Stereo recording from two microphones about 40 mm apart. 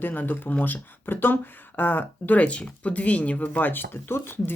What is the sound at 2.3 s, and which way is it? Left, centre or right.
Speech, left.